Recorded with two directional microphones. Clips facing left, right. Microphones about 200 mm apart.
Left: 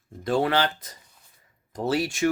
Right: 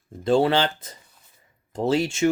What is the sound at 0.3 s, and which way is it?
Speech, 30° right (ahead or behind).